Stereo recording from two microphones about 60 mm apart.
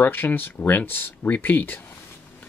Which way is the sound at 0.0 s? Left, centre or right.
Left.